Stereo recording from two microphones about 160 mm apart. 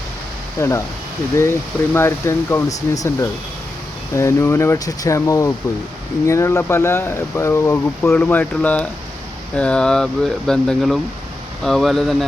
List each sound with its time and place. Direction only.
0.6 s speech: 20° left (ahead or behind); by 12.1 s centre (ahead or behind)